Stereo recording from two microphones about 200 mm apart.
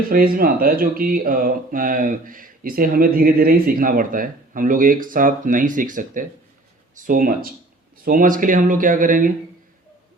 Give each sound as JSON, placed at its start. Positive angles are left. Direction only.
{"t": 0.1, "sound": "speech", "side_deg": -45}